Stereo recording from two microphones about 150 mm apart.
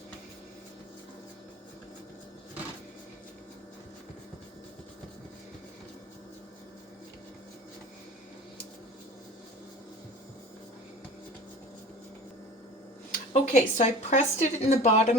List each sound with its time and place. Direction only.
13.1 s speech: 50° left (ahead or behind)